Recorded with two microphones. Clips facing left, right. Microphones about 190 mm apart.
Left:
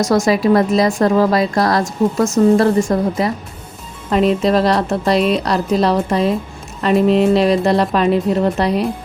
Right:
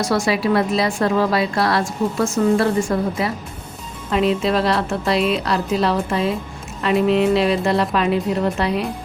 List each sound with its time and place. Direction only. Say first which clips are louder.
0.0 s a woman's voice: left 5 dB; 45° left (ahead or behind)